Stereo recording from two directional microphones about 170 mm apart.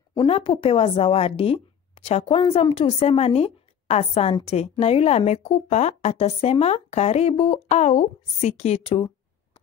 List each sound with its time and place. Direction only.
0.3 s speech: 30° left (ahead or behind)